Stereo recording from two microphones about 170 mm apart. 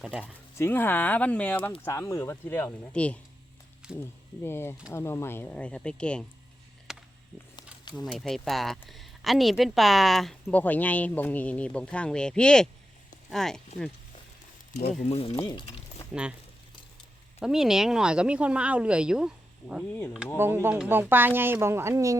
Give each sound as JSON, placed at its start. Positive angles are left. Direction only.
{"t": 0.0, "sound": "speech", "side_deg": -5}
{"t": 0.5, "sound": "speech", "side_deg": 10}
{"t": 3.8, "sound": "a sound", "side_deg": -5}
{"t": 4.4, "sound": "speech", "side_deg": 15}
{"t": 6.9, "sound": "a sound", "side_deg": 0}
{"t": 7.9, "sound": "speech", "side_deg": 0}
{"t": 15.0, "sound": "speech", "side_deg": 35}
{"t": 16.1, "sound": "speech", "side_deg": -5}
{"t": 17.4, "sound": "speech", "side_deg": -5}